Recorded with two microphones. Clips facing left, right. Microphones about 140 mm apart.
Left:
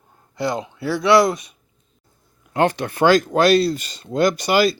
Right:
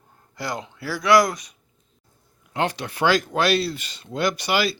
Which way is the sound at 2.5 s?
50° left (ahead or behind).